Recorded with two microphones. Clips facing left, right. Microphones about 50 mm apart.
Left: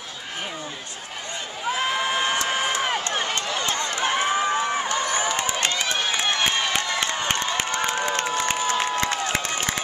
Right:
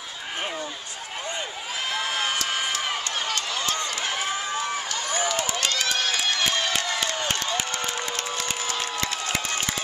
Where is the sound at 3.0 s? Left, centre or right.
Left.